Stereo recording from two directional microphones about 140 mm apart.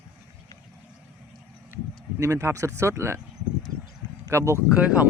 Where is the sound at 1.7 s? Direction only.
15° right (ahead or behind).